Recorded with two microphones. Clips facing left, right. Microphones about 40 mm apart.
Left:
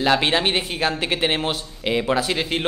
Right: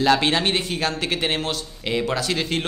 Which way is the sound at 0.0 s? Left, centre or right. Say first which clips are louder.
Even; centre.